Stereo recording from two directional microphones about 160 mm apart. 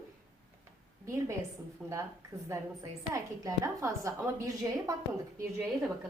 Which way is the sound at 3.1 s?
20° right (ahead or behind).